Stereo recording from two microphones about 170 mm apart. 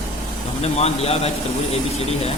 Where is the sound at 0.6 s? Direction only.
40° left (ahead or behind).